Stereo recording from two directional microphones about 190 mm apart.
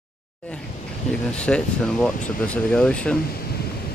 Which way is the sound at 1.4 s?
5° left (ahead or behind).